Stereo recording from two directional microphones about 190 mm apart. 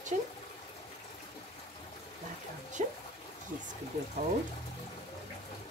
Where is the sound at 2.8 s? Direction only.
35° right (ahead or behind).